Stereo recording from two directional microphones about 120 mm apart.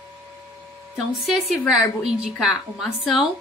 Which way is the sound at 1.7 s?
5° right (ahead or behind).